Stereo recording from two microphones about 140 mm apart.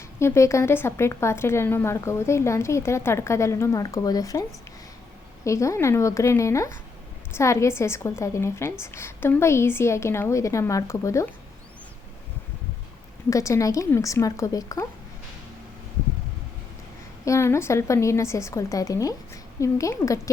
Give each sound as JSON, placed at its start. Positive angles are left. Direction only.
{"t": 0.2, "sound": "a woman's voice", "side_deg": 20}
{"t": 5.5, "sound": "a woman's voice", "side_deg": 20}
{"t": 13.3, "sound": "a woman's voice", "side_deg": 20}
{"t": 17.2, "sound": "a woman's voice", "side_deg": 20}